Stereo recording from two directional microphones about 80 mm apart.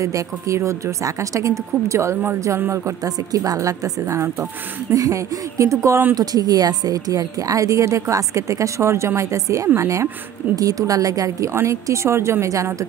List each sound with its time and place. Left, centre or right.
0.0 s a woman's voice: right
3.3 s a woman's voice: right
6.1 s a woman's voice: right